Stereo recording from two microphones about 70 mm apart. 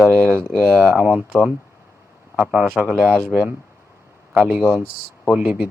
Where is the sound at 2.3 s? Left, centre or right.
Centre.